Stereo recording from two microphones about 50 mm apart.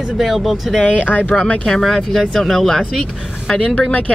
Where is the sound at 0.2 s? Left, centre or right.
Centre.